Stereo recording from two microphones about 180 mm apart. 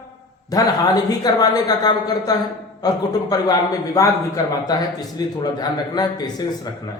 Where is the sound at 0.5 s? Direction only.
20° left (ahead or behind).